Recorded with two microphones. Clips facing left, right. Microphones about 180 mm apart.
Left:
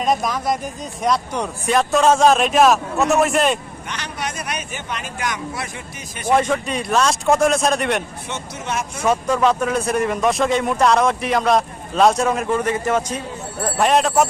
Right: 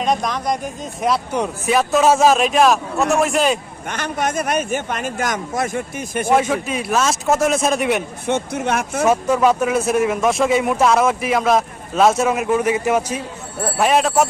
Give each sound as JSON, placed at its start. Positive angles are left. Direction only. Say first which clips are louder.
{"t": 0.0, "sound": "speech", "louder": "even", "side_deg": 0}
{"t": 3.8, "sound": "a man's voice", "louder": "right 7 dB", "side_deg": -50}
{"t": 6.3, "sound": "speech", "louder": "even", "side_deg": -5}
{"t": 8.3, "sound": "speech", "louder": "right 9 dB", "side_deg": -55}
{"t": 9.0, "sound": "speech", "louder": "right 1 dB", "side_deg": -5}